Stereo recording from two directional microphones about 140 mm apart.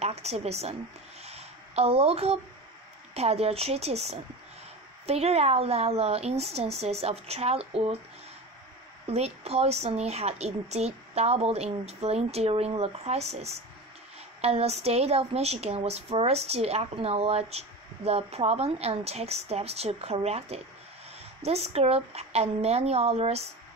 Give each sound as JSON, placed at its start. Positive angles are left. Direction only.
{"t": 0.0, "sound": "a woman's voice", "side_deg": -50}
{"t": 1.2, "sound": "a sound", "side_deg": -50}
{"t": 3.2, "sound": "a woman's voice", "side_deg": -45}
{"t": 9.0, "sound": "a woman's voice", "side_deg": -50}